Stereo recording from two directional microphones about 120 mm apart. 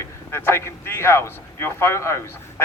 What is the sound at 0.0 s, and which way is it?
Speech, 20° left (ahead or behind).